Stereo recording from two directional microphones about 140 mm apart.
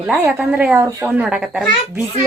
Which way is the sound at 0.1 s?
10° right (ahead or behind).